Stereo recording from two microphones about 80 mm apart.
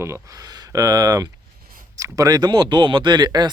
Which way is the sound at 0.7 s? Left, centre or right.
Right.